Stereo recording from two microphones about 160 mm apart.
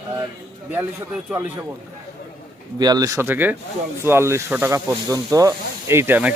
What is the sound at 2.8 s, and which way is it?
Speech, 25° right (ahead or behind).